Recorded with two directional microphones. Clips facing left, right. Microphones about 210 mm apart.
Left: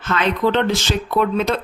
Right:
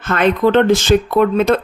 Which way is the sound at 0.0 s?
50° right (ahead or behind).